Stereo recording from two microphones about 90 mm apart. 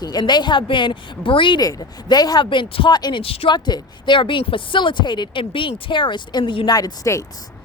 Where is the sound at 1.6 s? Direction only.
45° left (ahead or behind).